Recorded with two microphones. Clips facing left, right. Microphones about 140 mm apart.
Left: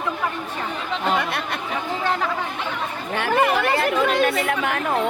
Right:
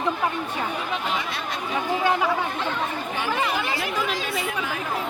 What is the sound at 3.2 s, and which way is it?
Speech, 55° left (ahead or behind).